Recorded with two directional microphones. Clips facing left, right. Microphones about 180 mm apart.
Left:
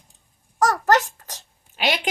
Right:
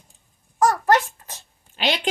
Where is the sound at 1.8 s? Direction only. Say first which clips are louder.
Even; 10° left (ahead or behind).